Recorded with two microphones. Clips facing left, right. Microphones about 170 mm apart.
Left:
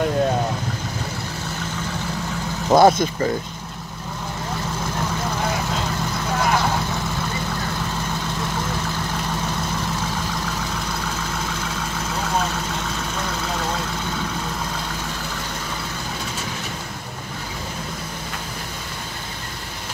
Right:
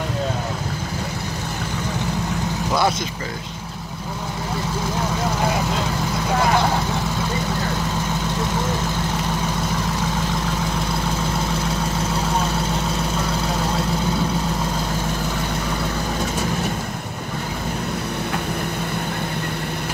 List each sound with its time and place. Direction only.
2.7 s speech: 50° left (ahead or behind)